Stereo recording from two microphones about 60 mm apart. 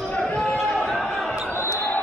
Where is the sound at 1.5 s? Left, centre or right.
Left.